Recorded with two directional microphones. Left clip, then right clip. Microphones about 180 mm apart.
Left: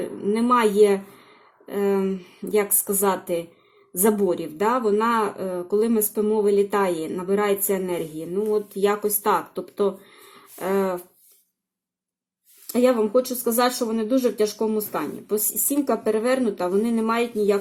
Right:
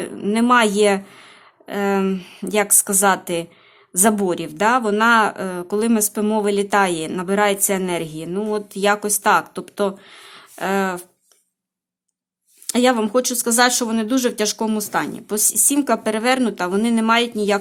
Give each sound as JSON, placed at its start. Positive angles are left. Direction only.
{"t": 0.0, "sound": "a woman's voice", "side_deg": -25}
{"t": 12.6, "sound": "speech", "side_deg": -20}